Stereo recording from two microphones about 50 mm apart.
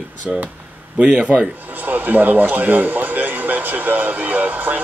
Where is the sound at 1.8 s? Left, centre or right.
Right.